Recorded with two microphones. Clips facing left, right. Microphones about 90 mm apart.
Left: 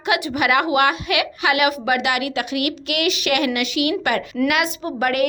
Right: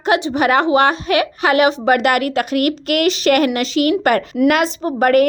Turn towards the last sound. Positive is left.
turn(degrees=-40)  # may be behind; listen again after turning